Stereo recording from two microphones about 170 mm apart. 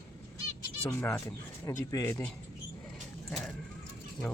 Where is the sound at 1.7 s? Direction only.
15° left (ahead or behind).